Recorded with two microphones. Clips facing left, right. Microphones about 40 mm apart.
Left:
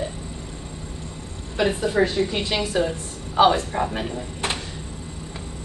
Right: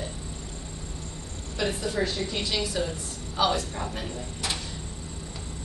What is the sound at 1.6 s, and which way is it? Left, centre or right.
A woman's voice, left.